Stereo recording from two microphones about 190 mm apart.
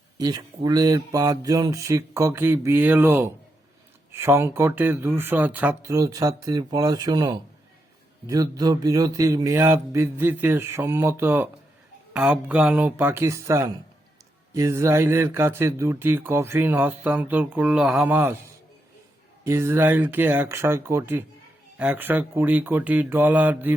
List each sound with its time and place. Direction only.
0.2 s speech: 20° right (ahead or behind)
19.5 s speech: 15° right (ahead or behind)